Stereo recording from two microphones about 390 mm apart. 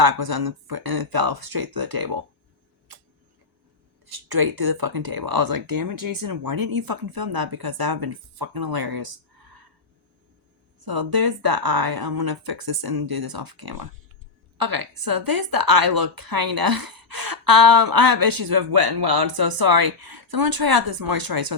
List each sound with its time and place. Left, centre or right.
0.0 s a woman's voice: right
4.0 s a woman's voice: right
10.8 s a woman's voice: right